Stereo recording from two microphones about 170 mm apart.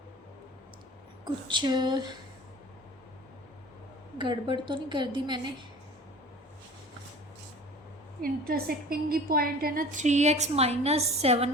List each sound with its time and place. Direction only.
1.2 s a woman's voice: 25° right (ahead or behind)
4.2 s a woman's voice: 30° right (ahead or behind)
8.2 s a woman's voice: 65° right (ahead or behind); by 11.5 s 40° right (ahead or behind)